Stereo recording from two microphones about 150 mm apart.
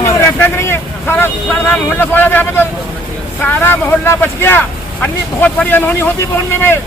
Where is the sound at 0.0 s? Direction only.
20° left (ahead or behind).